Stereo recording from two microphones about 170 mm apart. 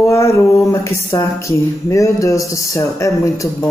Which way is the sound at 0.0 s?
15° left (ahead or behind).